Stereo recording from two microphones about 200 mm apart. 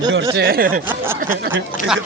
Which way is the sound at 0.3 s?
50° right (ahead or behind).